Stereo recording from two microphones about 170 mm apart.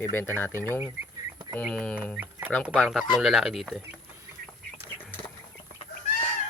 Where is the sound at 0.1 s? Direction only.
15° left (ahead or behind).